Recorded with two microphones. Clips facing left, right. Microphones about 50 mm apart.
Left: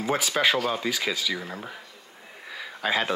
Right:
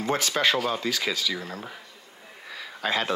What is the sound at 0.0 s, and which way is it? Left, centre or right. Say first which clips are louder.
Speech: even; centre.